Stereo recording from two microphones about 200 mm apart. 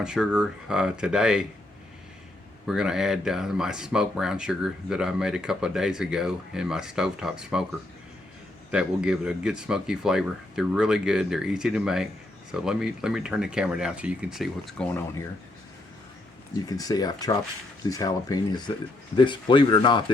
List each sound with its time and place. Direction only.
0.0 s speech: 5° right (ahead or behind)
2.6 s speech: 5° right (ahead or behind)
8.7 s speech: 5° right (ahead or behind)
16.6 s speech: 20° left (ahead or behind)